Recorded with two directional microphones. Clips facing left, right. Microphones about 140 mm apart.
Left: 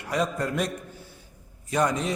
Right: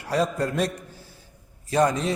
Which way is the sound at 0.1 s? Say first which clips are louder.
Right 3 dB; 35° right (ahead or behind).